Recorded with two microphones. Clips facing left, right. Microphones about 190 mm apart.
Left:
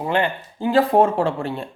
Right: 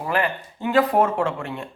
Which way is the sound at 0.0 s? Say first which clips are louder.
Left 2 dB; 25° left (ahead or behind).